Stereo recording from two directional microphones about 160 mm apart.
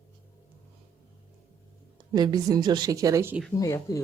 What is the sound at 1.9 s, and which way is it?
Speech, 25° right (ahead or behind).